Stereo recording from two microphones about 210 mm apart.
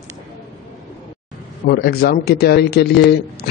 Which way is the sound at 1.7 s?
50° left (ahead or behind).